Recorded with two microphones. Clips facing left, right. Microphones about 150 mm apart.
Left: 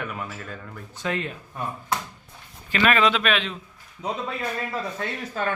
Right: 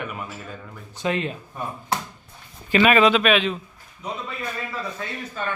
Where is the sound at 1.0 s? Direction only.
20° right (ahead or behind).